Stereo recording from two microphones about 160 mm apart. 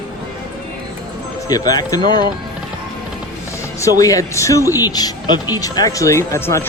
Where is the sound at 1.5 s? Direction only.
25° left (ahead or behind).